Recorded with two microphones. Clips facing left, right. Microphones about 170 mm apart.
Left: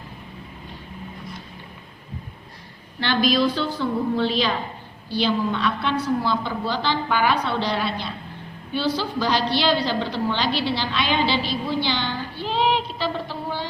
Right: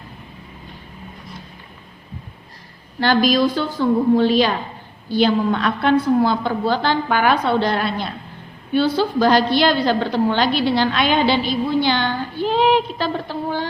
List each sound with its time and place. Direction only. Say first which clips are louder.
3.0 s a woman's voice: right 4 dB; 45° right (ahead or behind)